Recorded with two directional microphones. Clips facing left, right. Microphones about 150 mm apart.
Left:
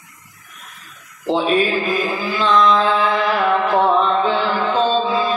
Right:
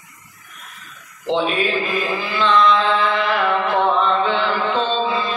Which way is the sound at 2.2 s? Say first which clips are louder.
Even; 40° left (ahead or behind).